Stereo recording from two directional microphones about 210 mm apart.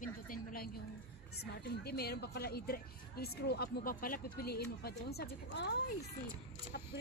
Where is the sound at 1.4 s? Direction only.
50° left (ahead or behind).